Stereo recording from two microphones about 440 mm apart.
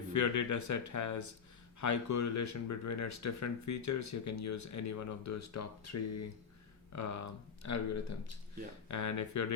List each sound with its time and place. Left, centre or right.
0.1 s speech: left